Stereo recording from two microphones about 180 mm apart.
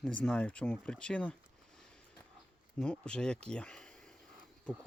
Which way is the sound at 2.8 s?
5° left (ahead or behind).